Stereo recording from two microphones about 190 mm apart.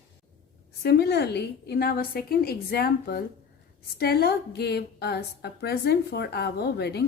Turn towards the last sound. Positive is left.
turn(degrees=60)  # may be behind; listen again after turning